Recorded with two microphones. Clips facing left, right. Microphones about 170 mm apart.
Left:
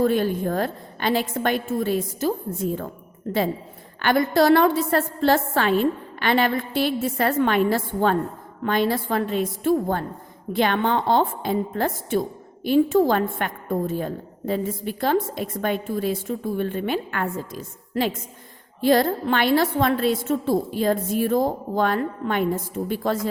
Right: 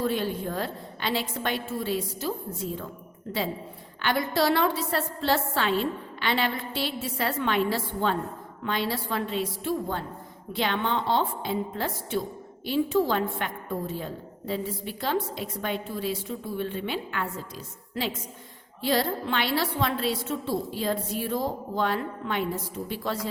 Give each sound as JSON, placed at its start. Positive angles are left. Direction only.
{"t": 0.0, "sound": "a woman's voice", "side_deg": 50}
{"t": 4.0, "sound": "a woman's voice", "side_deg": 50}